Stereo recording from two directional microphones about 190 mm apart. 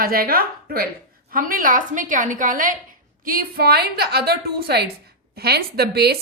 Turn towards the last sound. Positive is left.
turn(degrees=-55)  # may be behind; listen again after turning